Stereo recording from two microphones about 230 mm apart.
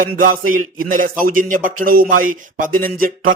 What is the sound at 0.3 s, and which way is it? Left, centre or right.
Speech, right.